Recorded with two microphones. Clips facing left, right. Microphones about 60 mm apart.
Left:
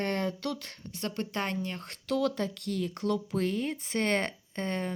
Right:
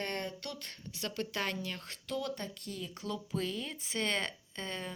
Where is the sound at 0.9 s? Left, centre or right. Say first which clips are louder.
Left 4 dB; left.